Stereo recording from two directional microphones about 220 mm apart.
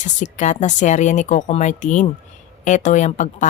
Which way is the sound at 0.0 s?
35° left (ahead or behind).